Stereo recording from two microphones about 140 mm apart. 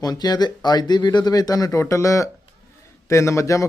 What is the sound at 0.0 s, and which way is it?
Speech, 30° left (ahead or behind).